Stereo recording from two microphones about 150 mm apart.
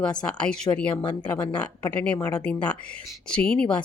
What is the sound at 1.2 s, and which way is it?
Speech, 10° left (ahead or behind).